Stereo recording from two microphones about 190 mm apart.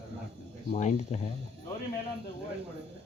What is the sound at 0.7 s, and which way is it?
Speech, 35° left (ahead or behind).